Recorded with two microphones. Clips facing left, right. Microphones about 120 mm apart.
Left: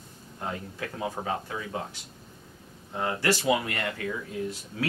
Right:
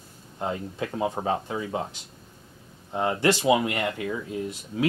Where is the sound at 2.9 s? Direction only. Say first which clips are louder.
Right 4 dB; 25° right (ahead or behind).